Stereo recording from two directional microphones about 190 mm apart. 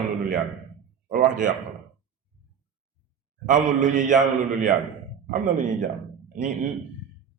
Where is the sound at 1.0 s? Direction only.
40° right (ahead or behind).